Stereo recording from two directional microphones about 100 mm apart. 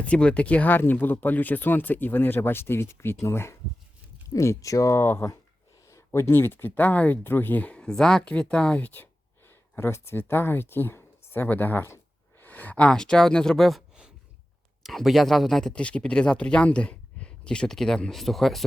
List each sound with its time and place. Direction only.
0.0 s speech: 10° left (ahead or behind)